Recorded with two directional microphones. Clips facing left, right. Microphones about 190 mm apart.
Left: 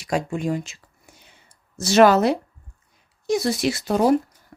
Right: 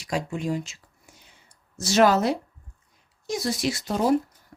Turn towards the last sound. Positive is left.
turn(degrees=65)  # may be behind; listen again after turning